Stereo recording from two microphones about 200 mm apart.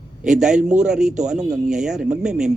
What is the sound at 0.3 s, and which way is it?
Speech, 5° right (ahead or behind).